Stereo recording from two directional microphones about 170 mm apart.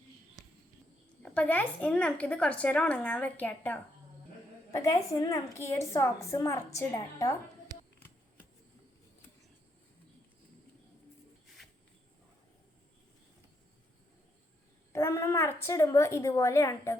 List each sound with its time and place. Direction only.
1.2 s a woman's voice: 5° left (ahead or behind)
14.9 s a woman's voice: 15° left (ahead or behind)